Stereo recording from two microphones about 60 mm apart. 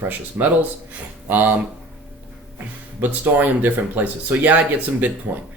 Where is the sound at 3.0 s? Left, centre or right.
Right.